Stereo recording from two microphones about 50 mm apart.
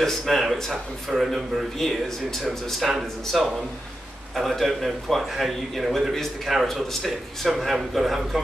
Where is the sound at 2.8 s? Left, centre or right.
Centre.